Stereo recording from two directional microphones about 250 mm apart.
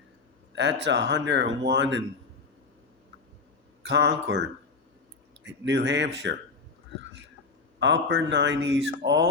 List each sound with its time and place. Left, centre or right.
0.5 s speech: right
3.8 s speech: right
7.8 s speech: right